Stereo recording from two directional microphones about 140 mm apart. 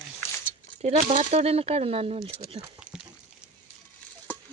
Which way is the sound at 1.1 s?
55° right (ahead or behind).